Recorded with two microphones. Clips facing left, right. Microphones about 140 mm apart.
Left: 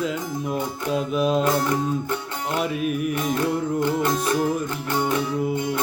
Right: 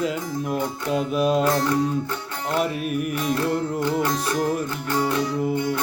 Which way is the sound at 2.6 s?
Centre (ahead or behind).